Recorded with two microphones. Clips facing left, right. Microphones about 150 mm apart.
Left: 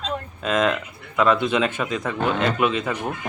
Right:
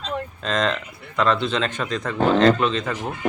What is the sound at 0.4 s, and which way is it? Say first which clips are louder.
Speech: left 3 dB; 5° left (ahead or behind).